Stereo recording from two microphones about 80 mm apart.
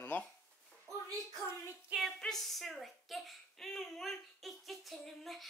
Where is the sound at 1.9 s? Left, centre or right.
Centre.